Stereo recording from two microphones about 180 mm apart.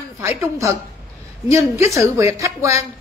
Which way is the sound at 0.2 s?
15° right (ahead or behind).